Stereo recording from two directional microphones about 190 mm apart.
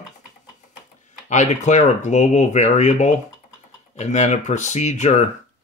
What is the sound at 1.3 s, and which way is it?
Speech, 40° left (ahead or behind).